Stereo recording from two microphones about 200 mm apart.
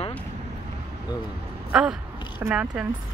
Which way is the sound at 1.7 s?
5° right (ahead or behind).